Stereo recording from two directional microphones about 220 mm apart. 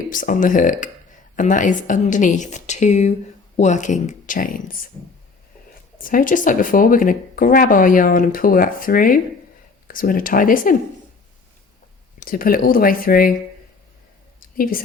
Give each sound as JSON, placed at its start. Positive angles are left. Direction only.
{"t": 0.1, "sound": "speech", "side_deg": 35}
{"t": 6.0, "sound": "speech", "side_deg": 40}
{"t": 12.2, "sound": "speech", "side_deg": 40}
{"t": 14.5, "sound": "speech", "side_deg": 40}